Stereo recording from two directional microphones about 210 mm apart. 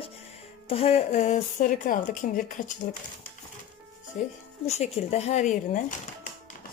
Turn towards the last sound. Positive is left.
turn(degrees=35)  # may be behind; listen again after turning